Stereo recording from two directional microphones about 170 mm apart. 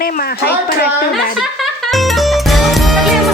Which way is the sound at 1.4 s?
Centre (ahead or behind).